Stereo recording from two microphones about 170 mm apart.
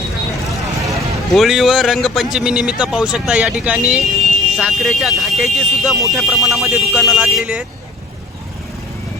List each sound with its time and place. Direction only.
0.5 s vehicle: 20° right (ahead or behind)
0.9 s speech: centre (ahead or behind)